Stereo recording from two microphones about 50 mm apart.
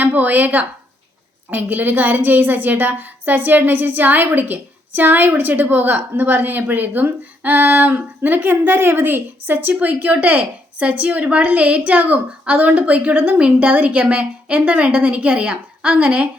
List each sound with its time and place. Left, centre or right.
0.0 s a woman's voice: right
13.1 s a woman's voice: right
13.4 s a woman's voice: right